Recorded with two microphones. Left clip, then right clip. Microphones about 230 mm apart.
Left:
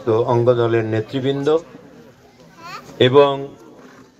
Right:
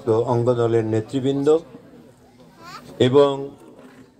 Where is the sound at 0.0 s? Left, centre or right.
Right.